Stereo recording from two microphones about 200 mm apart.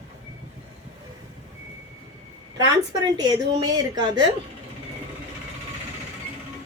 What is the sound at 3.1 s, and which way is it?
A woman's voice, 20° right (ahead or behind).